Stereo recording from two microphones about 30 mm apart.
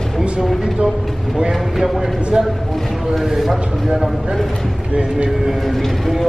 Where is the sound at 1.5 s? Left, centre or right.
Centre.